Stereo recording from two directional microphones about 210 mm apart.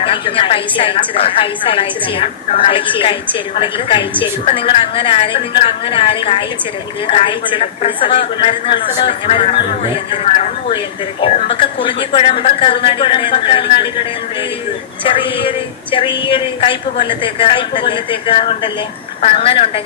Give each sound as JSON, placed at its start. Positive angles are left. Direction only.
{"t": 0.0, "sound": "a woman's voice", "side_deg": 25}
{"t": 15.0, "sound": "a woman's voice", "side_deg": 25}